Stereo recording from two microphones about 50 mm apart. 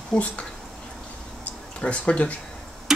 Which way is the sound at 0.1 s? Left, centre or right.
Left.